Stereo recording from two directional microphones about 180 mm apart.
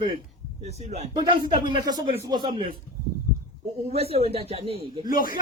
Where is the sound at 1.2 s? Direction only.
25° right (ahead or behind).